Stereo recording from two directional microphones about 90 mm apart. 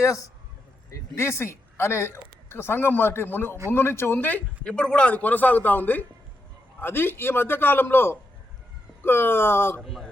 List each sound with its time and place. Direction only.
0.0 s a man's voice: 40° left (ahead or behind)
9.8 s speech: centre (ahead or behind)